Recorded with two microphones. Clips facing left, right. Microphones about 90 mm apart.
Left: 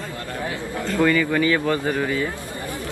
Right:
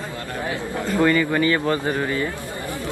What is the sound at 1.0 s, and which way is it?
Speech, 15° right (ahead or behind).